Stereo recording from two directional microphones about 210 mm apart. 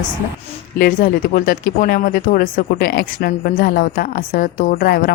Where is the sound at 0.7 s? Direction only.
45° left (ahead or behind).